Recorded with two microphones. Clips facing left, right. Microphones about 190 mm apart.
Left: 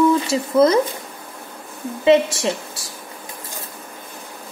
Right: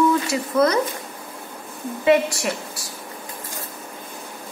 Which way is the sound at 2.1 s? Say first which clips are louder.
Left 3 dB; 25° left (ahead or behind).